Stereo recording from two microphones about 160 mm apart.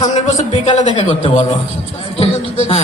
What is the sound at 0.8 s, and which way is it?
Speech, 30° left (ahead or behind).